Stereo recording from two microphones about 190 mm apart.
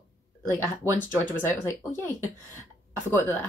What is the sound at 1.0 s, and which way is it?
A woman's voice, 10° left (ahead or behind).